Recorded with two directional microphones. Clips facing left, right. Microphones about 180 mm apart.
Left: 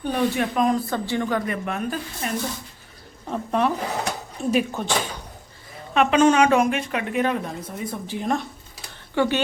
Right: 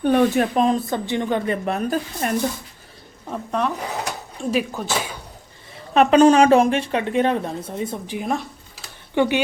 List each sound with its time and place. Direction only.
0.0 s speech: 55° right (ahead or behind)
0.5 s speech: 25° right (ahead or behind)
1.6 s speech: 35° right (ahead or behind)
2.2 s speech: 55° right (ahead or behind)
3.2 s speech: centre (ahead or behind)
5.9 s speech: 35° right (ahead or behind)
8.0 s speech: 15° right (ahead or behind)